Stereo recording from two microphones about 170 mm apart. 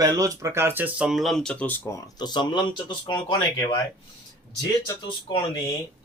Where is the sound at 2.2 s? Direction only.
25° left (ahead or behind).